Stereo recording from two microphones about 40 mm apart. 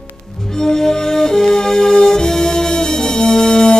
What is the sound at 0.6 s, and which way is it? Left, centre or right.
Music, centre.